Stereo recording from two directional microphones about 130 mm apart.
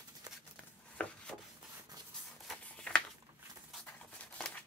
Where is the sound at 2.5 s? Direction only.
10° left (ahead or behind).